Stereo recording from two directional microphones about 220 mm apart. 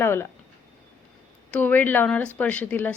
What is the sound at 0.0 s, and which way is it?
Speech, 10° left (ahead or behind).